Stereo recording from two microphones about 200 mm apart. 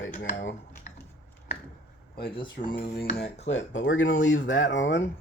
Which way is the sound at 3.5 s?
70° left (ahead or behind).